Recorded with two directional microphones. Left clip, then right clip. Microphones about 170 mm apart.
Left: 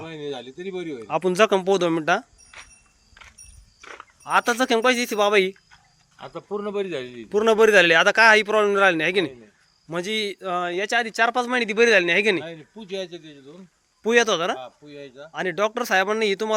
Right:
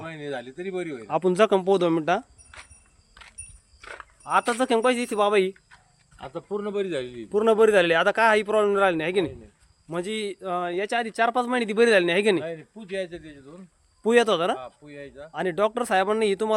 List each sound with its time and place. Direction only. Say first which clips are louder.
0.0 s speech: left 1 dB; 15° right (ahead or behind)
3.2 s vehicle: left 1 dB; 40° left (ahead or behind)
3.8 s livestock: even; 55° left (ahead or behind)
4.2 s speech: left 2 dB; 5° left (ahead or behind)
6.1 s speech: left 1 dB; 25° right (ahead or behind)
7.3 s speech: left 2 dB; 5° right (ahead or behind)